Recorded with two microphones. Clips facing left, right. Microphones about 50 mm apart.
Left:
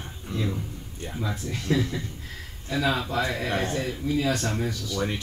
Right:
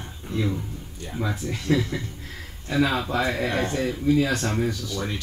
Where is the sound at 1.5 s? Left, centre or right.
Right.